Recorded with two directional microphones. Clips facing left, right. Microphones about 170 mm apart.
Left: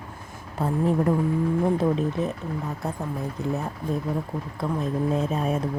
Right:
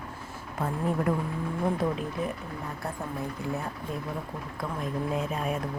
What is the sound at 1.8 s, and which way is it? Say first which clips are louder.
Speech: left 6 dB; 25° left (ahead or behind).